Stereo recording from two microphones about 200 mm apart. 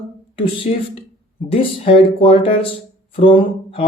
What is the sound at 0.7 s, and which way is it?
Speech, 35° left (ahead or behind).